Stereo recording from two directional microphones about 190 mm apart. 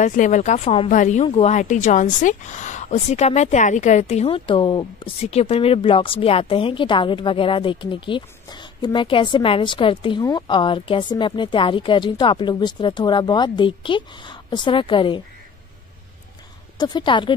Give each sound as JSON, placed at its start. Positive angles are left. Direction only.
{"t": 0.0, "sound": "a woman's voice", "side_deg": 40}
{"t": 16.7, "sound": "a woman's voice", "side_deg": 25}